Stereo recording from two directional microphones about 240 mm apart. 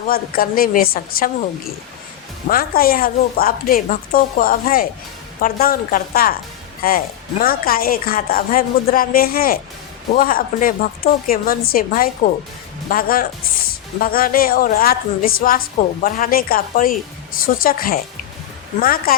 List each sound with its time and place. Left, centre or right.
0.1 s a woman's voice: left